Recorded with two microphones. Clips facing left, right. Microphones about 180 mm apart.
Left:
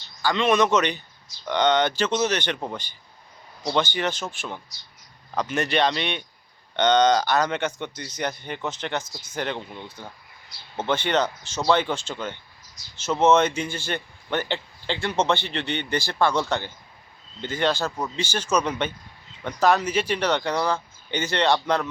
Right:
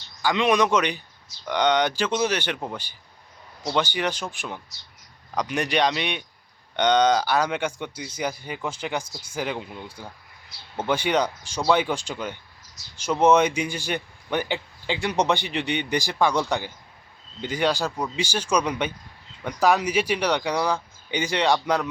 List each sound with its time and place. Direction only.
0.2 s a man's voice: 15° right (ahead or behind)